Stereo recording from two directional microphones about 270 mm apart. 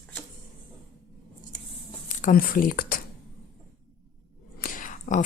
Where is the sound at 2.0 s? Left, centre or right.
Left.